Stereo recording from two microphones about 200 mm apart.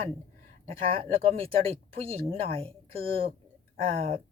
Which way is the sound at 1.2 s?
30° right (ahead or behind).